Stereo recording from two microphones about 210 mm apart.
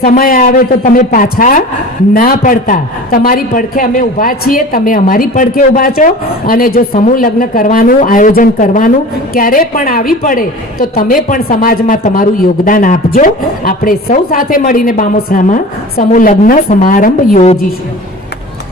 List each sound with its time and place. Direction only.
0.0 s a woman's voice: 40° left (ahead or behind)